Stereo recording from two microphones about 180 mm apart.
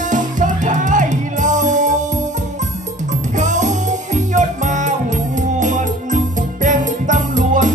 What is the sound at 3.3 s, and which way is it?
Music, 40° right (ahead or behind).